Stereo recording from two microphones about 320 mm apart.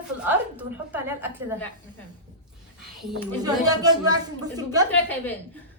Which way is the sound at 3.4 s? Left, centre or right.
Centre.